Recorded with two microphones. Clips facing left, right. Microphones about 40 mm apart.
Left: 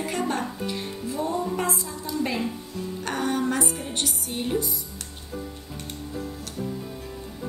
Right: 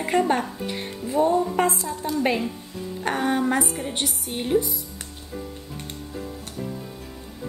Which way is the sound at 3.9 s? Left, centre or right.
Centre.